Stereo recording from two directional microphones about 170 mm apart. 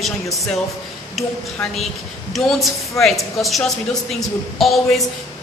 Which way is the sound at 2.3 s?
Centre (ahead or behind).